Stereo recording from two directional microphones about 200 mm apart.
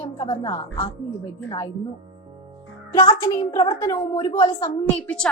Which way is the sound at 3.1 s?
20° left (ahead or behind).